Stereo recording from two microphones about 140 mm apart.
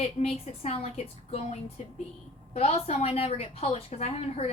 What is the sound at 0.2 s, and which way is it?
A woman's voice, 50° left (ahead or behind).